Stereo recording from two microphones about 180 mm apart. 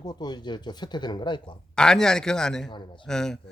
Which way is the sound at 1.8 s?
5° left (ahead or behind).